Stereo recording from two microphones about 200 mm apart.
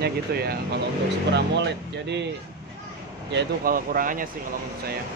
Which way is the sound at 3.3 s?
45° right (ahead or behind).